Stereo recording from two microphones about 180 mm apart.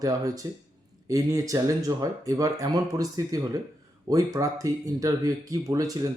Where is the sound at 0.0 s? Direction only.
20° right (ahead or behind).